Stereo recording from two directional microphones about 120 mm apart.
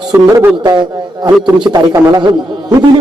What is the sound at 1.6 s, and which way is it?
Speech, 35° right (ahead or behind).